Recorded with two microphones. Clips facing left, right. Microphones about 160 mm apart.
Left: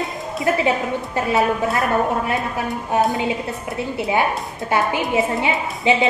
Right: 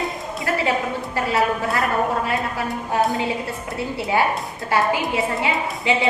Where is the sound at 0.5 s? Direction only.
20° left (ahead or behind).